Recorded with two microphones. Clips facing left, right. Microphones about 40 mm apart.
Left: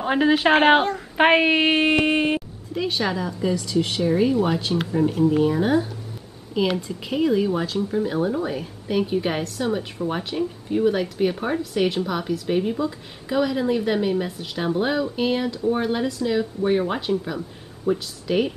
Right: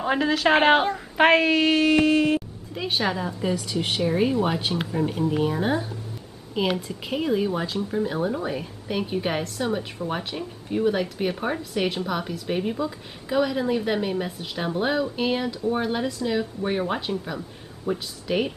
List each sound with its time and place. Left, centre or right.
0.0 s a woman's voice: centre
1.1 s child singing: centre
1.4 s a woman's voice: left
2.9 s speech: centre